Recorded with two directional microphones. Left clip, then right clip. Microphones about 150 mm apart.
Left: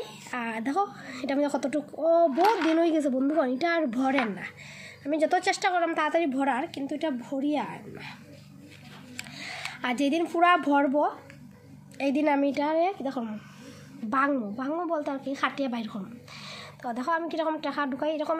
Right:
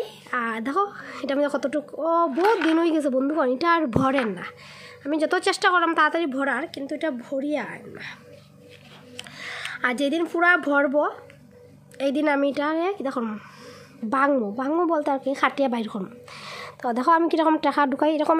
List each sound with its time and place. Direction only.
0.0 s a woman's voice: 35° right (ahead or behind)
9.4 s a woman's voice: 35° right (ahead or behind); by 18.4 s 65° right (ahead or behind)